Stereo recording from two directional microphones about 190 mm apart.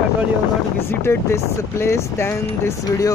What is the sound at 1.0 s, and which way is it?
Speech, 15° left (ahead or behind).